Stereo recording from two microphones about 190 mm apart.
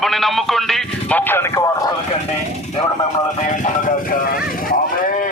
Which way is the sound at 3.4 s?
40° left (ahead or behind).